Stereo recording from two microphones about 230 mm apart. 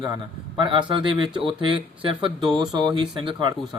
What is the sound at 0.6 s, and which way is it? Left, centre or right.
Speech, right.